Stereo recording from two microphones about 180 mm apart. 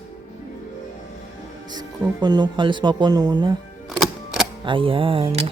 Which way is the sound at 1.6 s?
25° right (ahead or behind).